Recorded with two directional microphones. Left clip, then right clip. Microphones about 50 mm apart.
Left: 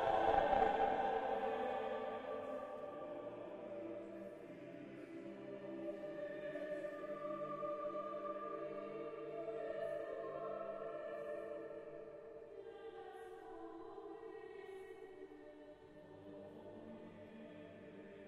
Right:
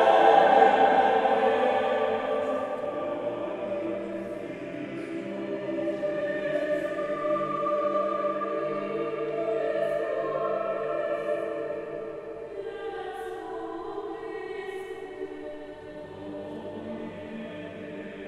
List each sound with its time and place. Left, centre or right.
0.0 s music: centre
5.5 s choir: centre